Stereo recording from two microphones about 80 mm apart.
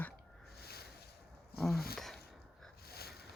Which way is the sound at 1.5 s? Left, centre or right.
Centre.